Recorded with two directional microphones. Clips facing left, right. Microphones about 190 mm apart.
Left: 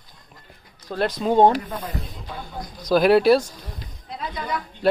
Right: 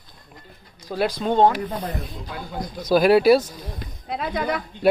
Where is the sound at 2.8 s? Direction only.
5° right (ahead or behind).